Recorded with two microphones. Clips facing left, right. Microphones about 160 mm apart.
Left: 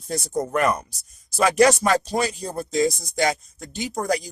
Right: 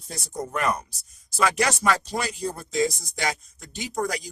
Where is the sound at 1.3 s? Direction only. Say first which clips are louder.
Left 7 dB; 45° left (ahead or behind).